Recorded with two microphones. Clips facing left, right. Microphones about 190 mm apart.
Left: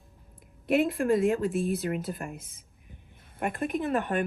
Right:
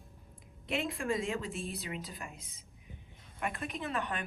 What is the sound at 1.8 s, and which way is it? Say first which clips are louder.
A woman's voice: left 10 dB; 55° left (ahead or behind).